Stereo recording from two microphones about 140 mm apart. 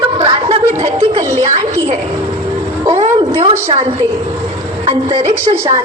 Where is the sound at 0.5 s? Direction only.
55° right (ahead or behind).